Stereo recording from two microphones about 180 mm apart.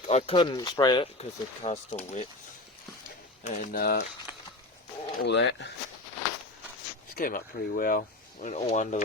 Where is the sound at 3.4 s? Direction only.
45° left (ahead or behind).